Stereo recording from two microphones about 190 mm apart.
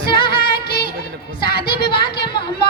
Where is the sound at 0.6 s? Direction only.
55° left (ahead or behind).